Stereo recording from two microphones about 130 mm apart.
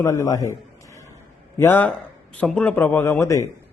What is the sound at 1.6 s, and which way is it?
A man's voice, 15° left (ahead or behind).